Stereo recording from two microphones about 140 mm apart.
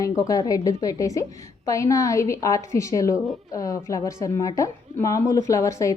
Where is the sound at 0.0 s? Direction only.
25° left (ahead or behind).